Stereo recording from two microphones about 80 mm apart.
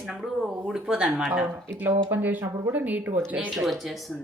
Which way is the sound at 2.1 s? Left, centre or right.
Right.